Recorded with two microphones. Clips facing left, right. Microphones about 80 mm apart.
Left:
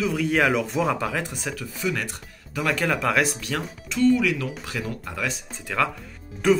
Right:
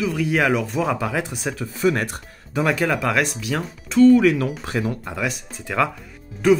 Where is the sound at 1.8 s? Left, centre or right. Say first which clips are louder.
Right 7 dB; right.